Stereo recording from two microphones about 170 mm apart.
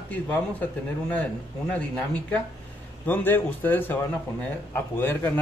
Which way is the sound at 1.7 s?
10° left (ahead or behind).